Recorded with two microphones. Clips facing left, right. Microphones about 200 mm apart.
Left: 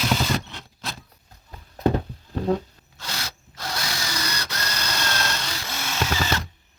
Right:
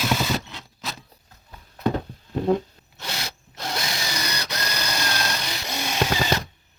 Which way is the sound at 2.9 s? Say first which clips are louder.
Right 2 dB; 20° right (ahead or behind).